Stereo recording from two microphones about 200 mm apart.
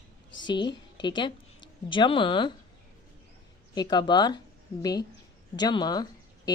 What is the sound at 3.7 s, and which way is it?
A woman's voice, 20° left (ahead or behind).